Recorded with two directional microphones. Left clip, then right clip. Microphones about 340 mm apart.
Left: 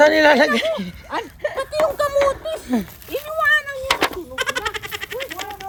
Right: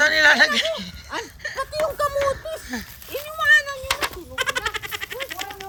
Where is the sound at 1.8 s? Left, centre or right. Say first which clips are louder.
Left 1 dB; left.